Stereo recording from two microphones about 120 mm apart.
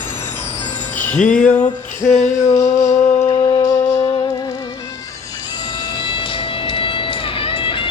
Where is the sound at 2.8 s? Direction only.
70° left (ahead or behind).